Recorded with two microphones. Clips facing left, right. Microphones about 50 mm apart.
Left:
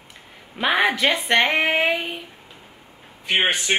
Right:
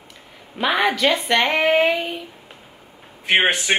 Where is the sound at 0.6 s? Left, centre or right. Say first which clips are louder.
Right 1 dB; centre.